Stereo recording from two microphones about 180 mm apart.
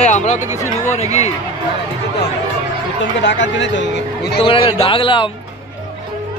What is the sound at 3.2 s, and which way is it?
Speech, 85° left.